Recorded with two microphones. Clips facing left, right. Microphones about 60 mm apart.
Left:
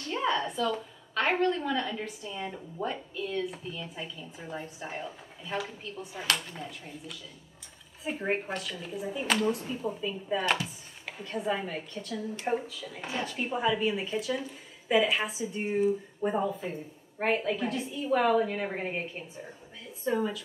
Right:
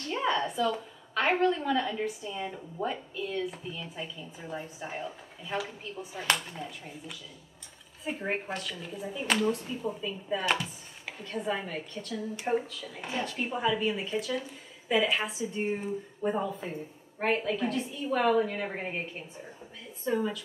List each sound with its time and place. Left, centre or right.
0.0 s a woman's voice: centre
6.2 s speech: right
6.5 s a woman's voice: centre
8.0 s a woman's voice: centre
9.3 s a woman's voice: centre
20.1 s speech: centre